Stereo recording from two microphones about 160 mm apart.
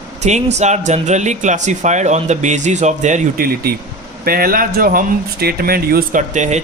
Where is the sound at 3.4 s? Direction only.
70° right (ahead or behind).